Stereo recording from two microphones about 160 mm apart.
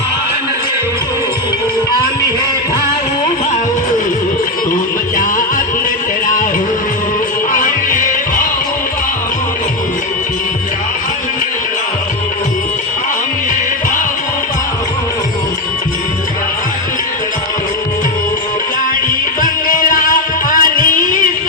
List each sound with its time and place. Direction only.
4.7 s music: 60° left (ahead or behind)
7.5 s music: 60° left (ahead or behind)
19.4 s music: 60° left (ahead or behind)